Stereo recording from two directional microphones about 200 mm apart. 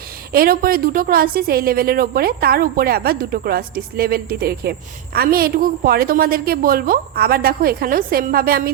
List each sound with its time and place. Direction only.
0.3 s a woman's voice: 45° right (ahead or behind)